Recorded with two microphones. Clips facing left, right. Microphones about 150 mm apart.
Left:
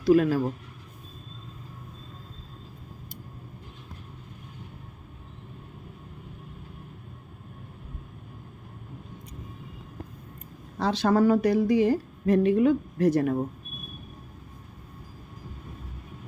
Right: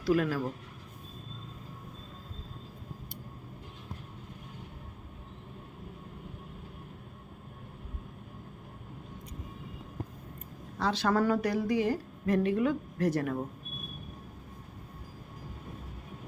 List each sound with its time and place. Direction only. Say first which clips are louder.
0.0 s a woman's voice: left 7 dB; 25° left (ahead or behind)
10.8 s a woman's voice: left 5 dB; 20° left (ahead or behind)